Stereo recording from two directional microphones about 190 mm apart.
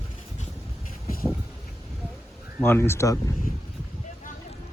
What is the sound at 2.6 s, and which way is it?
Speech, 10° left (ahead or behind).